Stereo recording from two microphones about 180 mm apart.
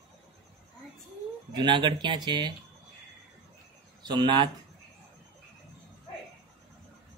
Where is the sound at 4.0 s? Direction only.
25° right (ahead or behind).